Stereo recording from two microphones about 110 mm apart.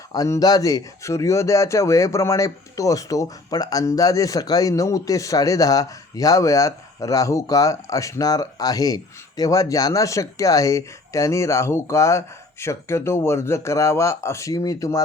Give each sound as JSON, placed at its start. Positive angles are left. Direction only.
{"t": 0.1, "sound": "speech", "side_deg": 35}